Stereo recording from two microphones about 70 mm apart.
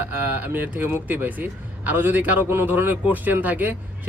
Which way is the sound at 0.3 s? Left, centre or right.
Right.